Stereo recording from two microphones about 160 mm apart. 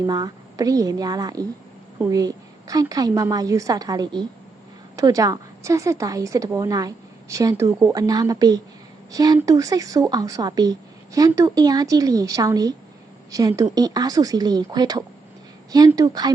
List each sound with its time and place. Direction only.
0.0 s a woman's voice: 25° right (ahead or behind)